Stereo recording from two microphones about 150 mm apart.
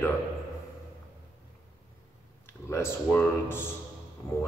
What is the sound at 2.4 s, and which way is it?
Speech, 15° left (ahead or behind).